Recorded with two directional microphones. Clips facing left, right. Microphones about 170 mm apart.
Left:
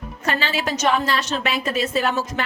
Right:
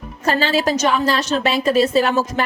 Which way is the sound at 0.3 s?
40° right (ahead or behind).